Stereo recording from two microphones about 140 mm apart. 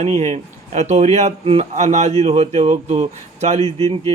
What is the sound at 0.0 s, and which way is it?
A man's voice, 55° right (ahead or behind).